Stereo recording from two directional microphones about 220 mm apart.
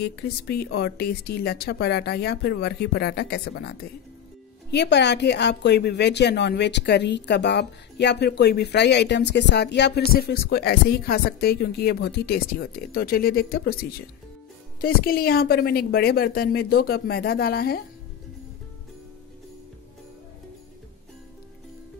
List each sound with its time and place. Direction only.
0.0 s a woman's voice: 45° left (ahead or behind)